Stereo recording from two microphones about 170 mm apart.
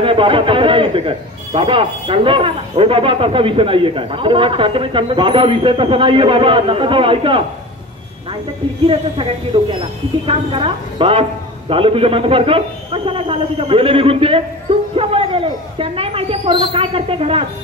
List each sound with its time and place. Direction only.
0.0 s a man's voice: 30° right (ahead or behind)
8.8 s a man's voice: 30° right (ahead or behind)